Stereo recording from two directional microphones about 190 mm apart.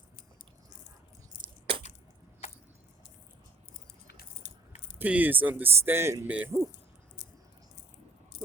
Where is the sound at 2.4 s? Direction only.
35° left (ahead or behind).